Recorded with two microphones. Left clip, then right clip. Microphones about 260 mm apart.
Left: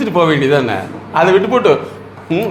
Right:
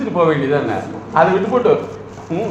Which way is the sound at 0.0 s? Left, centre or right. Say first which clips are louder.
Left 3 dB; left.